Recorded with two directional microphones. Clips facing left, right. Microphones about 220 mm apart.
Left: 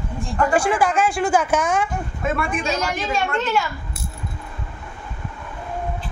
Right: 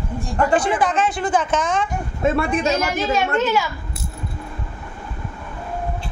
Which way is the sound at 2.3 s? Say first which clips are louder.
Right 4 dB; 35° right (ahead or behind).